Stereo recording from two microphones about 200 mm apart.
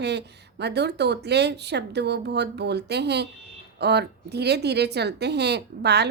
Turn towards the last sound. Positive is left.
turn(degrees=-55)  # may be behind; listen again after turning